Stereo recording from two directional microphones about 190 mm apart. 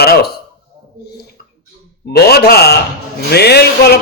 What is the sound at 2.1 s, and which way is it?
A man's voice, 55° left (ahead or behind).